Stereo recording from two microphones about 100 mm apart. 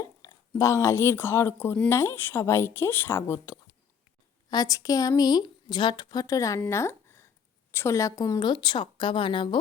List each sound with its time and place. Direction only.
0.0 s a woman's voice: 35° left (ahead or behind)
4.4 s a woman's voice: 40° left (ahead or behind)
6.7 s a sound: 25° left (ahead or behind)
7.7 s a woman's voice: 25° left (ahead or behind)
8.4 s speech: 50° left (ahead or behind)